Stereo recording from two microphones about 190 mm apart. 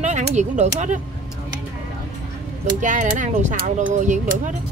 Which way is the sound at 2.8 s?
40° right (ahead or behind).